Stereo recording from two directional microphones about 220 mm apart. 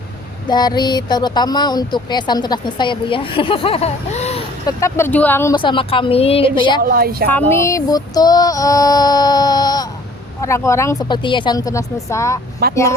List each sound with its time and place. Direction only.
0.4 s speech: 20° left (ahead or behind)
4.6 s speech: 10° left (ahead or behind)
6.8 s a woman's voice: 40° right (ahead or behind)
7.6 s female singing: 15° left (ahead or behind)
12.6 s a woman's voice: 45° right (ahead or behind)